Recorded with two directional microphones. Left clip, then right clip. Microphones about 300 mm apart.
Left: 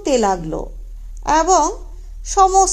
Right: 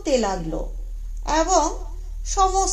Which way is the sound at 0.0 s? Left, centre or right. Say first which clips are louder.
Left 5 dB; left.